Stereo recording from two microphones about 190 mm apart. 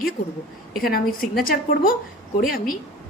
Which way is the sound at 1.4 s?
50° left (ahead or behind).